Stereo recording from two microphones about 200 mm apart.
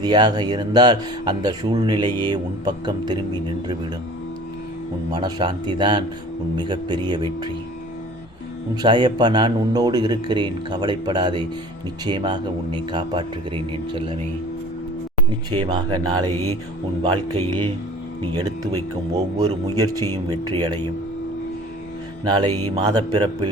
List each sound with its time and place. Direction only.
0.0 s speech: 20° right (ahead or behind)
5.1 s speech: 25° right (ahead or behind)
8.7 s speech: 20° right (ahead or behind)
15.4 s speech: 20° right (ahead or behind)
20.0 s speech: 90° right
20.4 s speech: 20° right (ahead or behind)
22.2 s speech: 20° right (ahead or behind)